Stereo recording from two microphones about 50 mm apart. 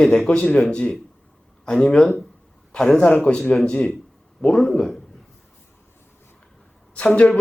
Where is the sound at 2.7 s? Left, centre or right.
Centre.